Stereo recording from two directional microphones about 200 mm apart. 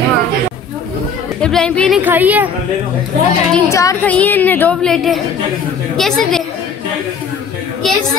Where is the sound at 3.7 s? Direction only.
15° left (ahead or behind).